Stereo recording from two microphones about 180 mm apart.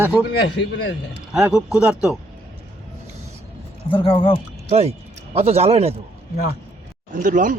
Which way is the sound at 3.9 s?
30° left (ahead or behind).